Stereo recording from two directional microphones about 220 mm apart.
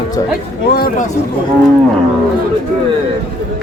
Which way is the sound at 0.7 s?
45° left (ahead or behind).